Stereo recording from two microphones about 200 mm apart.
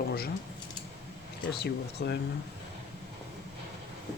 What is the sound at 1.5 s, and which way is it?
Speech, 55° left (ahead or behind).